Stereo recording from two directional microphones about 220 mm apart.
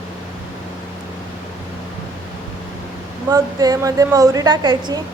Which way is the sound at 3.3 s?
15° right (ahead or behind).